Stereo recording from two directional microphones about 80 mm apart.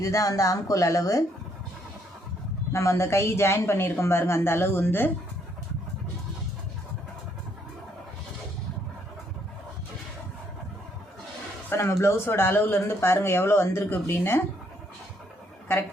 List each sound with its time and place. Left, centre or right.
0.0 s speech: left
2.7 s a woman's voice: left
11.7 s speech: left